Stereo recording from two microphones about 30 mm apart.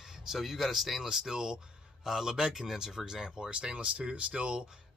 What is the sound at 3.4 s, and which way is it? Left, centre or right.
Speech, right.